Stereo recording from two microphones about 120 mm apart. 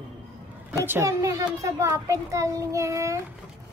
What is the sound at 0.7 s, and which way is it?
A child's voice, 25° right (ahead or behind).